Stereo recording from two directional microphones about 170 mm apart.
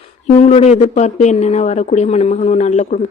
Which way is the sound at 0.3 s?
40° left (ahead or behind).